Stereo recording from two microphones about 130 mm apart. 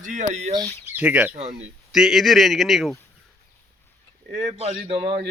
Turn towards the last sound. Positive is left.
turn(degrees=-45)  # may be behind; listen again after turning